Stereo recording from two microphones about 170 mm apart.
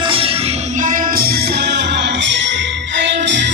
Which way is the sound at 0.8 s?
50° right (ahead or behind).